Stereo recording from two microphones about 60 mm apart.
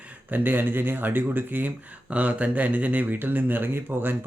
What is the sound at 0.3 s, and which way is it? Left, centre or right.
Speech, right.